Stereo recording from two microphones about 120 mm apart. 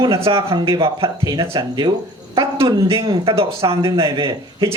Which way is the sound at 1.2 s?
30° right (ahead or behind).